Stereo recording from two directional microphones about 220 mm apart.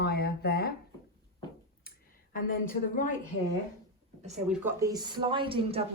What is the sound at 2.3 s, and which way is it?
Speech, 40° left (ahead or behind).